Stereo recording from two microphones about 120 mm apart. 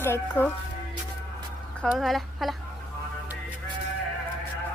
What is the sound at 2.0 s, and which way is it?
Speech, centre (ahead or behind).